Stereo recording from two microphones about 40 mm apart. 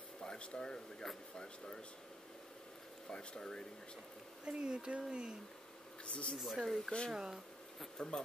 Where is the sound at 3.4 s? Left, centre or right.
Centre.